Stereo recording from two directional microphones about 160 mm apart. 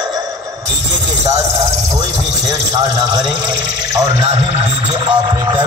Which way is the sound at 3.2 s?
25° right (ahead or behind).